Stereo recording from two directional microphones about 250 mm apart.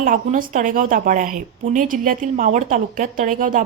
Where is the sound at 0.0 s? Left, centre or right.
Right.